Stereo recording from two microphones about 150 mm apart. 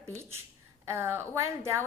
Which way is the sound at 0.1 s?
15° right (ahead or behind).